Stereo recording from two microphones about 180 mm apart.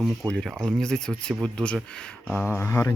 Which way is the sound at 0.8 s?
5° left (ahead or behind).